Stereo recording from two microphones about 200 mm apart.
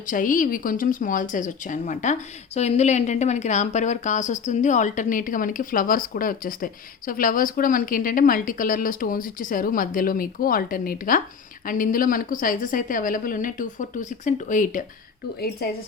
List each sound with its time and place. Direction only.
0.1 s a woman's voice: 40° left (ahead or behind)